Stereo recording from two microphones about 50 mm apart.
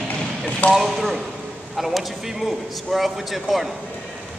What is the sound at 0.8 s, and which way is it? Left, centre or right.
A man's voice, centre.